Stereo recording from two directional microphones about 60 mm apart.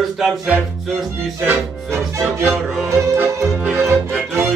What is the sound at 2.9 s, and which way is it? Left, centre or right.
Music, right.